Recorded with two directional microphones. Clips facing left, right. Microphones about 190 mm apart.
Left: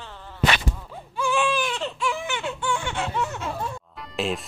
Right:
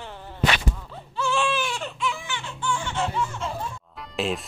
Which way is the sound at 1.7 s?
35° left (ahead or behind).